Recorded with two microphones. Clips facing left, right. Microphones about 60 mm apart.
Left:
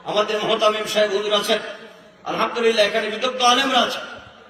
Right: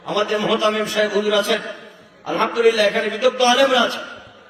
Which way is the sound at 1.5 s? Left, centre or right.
Centre.